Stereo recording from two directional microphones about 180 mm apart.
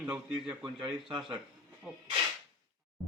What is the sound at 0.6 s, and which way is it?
Speech, 25° right (ahead or behind).